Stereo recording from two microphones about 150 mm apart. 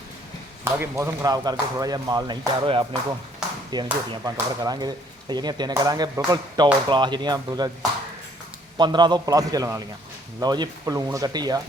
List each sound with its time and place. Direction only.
0.6 s speech: 20° right (ahead or behind)
8.8 s speech: 30° right (ahead or behind)